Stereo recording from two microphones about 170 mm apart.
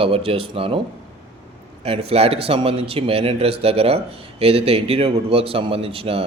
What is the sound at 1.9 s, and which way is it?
Speech, 35° right (ahead or behind).